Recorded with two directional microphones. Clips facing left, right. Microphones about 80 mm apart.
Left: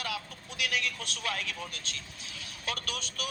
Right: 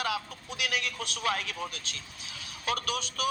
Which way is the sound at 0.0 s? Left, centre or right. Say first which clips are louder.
Right 5 dB; centre.